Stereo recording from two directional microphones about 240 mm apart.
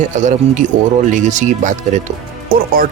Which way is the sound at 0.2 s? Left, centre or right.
Right.